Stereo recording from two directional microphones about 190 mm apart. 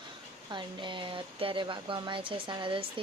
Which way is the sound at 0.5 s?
25° right (ahead or behind).